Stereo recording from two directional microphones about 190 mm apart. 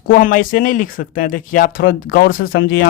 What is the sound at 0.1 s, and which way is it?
Speech, 45° left (ahead or behind).